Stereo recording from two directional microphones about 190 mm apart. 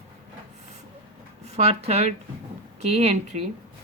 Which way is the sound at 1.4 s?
35° right (ahead or behind).